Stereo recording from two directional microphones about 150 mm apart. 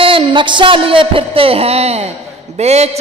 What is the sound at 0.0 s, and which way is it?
A man's voice, 35° right (ahead or behind).